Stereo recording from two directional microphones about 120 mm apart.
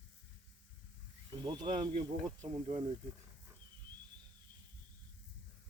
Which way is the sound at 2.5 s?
45° right (ahead or behind).